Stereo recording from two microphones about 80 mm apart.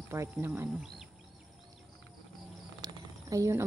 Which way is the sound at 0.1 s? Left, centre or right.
Right.